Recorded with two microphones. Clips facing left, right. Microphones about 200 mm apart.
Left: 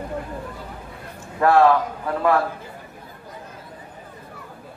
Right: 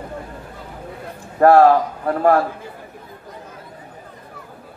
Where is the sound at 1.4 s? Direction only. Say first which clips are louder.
Right 6 dB; 40° right (ahead or behind).